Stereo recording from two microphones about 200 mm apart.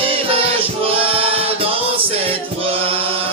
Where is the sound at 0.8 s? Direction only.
30° right (ahead or behind).